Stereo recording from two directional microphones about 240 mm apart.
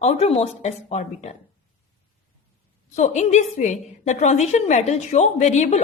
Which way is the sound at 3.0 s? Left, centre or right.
Left.